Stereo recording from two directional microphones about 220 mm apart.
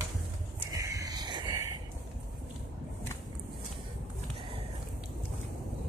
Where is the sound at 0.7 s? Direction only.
15° right (ahead or behind).